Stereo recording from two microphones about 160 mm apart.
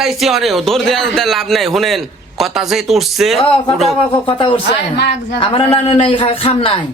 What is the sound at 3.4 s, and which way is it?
Speech, 35° left (ahead or behind).